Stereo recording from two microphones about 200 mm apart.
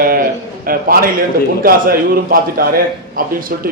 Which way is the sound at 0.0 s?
45° right (ahead or behind).